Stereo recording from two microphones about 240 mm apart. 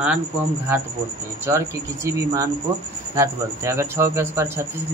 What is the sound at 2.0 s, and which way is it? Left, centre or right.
Speech, centre.